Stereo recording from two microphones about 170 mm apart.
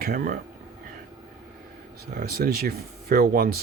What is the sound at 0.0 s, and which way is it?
Speech, 55° right (ahead or behind).